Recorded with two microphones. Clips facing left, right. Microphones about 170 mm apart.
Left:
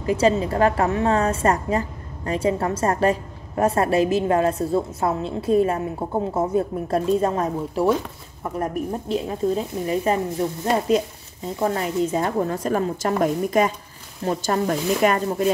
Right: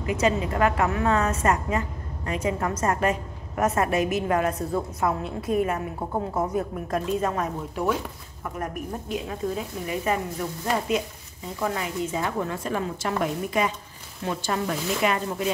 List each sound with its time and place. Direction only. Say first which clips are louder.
0.0 s a woman's voice: left 5 dB; 35° left (ahead or behind)
9.1 s a woman's voice: left 6 dB; 30° left (ahead or behind)